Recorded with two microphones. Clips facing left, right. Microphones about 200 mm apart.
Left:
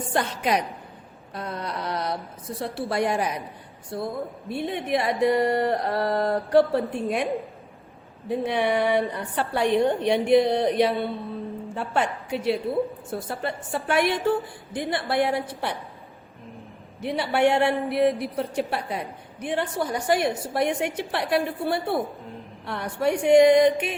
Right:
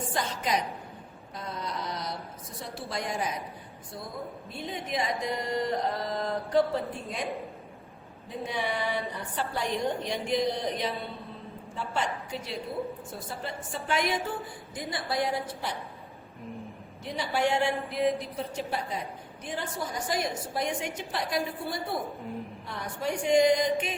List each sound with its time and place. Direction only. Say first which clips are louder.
0.1 s a man's voice: left 7 dB; 65° left (ahead or behind)
8.3 s a man's voice: left 9 dB; 65° left (ahead or behind)
17.0 s a man's voice: left 7 dB; 65° left (ahead or behind)